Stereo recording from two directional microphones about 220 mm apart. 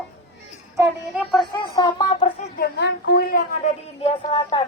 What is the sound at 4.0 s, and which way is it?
Speech, 25° left (ahead or behind).